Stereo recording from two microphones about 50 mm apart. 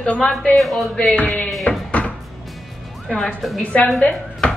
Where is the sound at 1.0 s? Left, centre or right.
Left.